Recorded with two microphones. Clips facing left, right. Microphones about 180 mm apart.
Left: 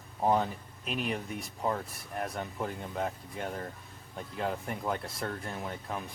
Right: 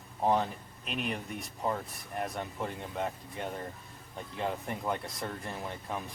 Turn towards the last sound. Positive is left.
turn(degrees=0)  # may be behind; listen again after turning